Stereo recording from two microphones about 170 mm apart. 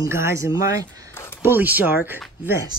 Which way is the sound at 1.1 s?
15° left (ahead or behind).